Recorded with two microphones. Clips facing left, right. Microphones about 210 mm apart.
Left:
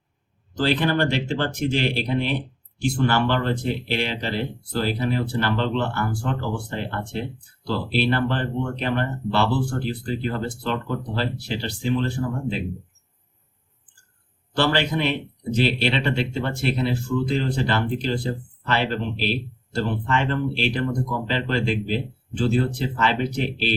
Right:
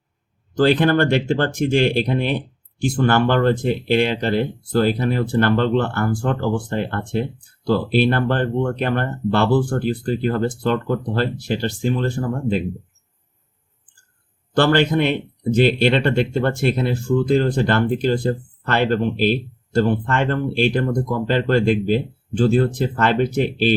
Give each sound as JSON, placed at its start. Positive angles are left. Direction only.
{"t": 0.5, "sound": "speech", "side_deg": -50}
{"t": 14.5, "sound": "speech", "side_deg": -50}